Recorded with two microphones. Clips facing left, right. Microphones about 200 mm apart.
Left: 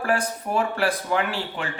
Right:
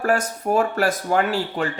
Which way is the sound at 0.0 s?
45° right (ahead or behind).